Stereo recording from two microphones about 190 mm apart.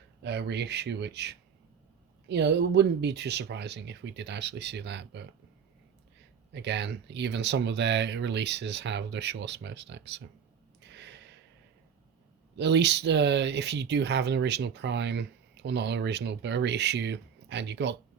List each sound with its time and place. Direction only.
0.2 s speech: 65° right (ahead or behind)
6.5 s speech: 65° right (ahead or behind)
10.8 s a sound: 65° right (ahead or behind)
12.5 s speech: 65° right (ahead or behind)